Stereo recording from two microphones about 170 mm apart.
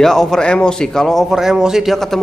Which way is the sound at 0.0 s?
Centre (ahead or behind).